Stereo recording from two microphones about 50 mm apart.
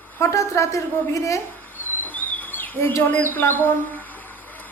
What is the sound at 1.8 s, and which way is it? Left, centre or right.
Bird, left.